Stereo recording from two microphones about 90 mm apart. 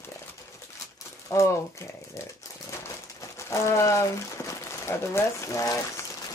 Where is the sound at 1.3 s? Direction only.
35° left (ahead or behind).